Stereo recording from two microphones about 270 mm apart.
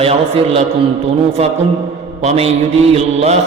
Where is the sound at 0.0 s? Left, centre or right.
Right.